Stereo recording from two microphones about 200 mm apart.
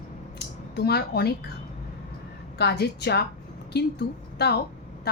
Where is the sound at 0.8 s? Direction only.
55° left (ahead or behind).